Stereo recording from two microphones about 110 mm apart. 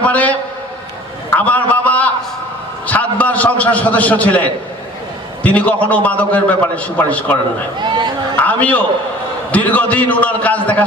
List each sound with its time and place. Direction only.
0.0 s a man's voice: 15° left (ahead or behind)
1.3 s a sound: 15° left (ahead or behind)
2.8 s a man's voice: 15° left (ahead or behind)
7.8 s speech: 45° right (ahead or behind)
8.4 s a sound: 15° left (ahead or behind)
9.5 s a man's voice: 15° left (ahead or behind)